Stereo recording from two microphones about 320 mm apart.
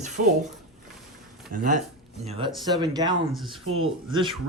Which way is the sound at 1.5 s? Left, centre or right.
Right.